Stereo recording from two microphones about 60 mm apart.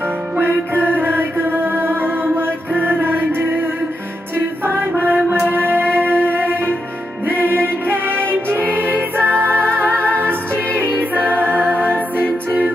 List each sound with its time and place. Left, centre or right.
0.4 s music: right
5.3 s music: right
9.8 s music: left
10.2 s music: right